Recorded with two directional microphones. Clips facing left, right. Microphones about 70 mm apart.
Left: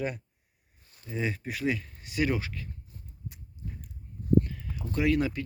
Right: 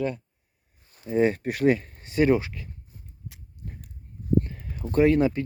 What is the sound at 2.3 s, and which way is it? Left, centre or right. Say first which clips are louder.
Speech: right 9 dB; right.